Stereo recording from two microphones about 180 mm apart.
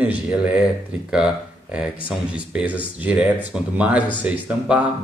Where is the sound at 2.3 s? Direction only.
5° right (ahead or behind).